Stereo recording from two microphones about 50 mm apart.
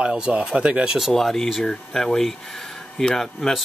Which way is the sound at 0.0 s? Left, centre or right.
Centre.